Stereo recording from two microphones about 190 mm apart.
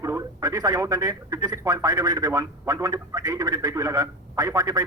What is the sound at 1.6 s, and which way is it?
A man's voice, 20° right (ahead or behind).